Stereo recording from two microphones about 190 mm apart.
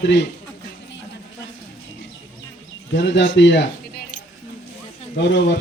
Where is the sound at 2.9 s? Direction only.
70° left (ahead or behind).